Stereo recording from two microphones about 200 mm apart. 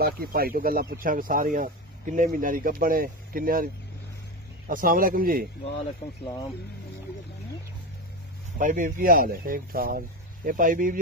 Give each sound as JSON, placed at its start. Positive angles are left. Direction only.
{"t": 0.0, "sound": "speech", "side_deg": -50}
{"t": 8.5, "sound": "speech", "side_deg": -40}